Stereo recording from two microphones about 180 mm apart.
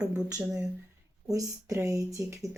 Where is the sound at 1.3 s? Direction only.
20° right (ahead or behind).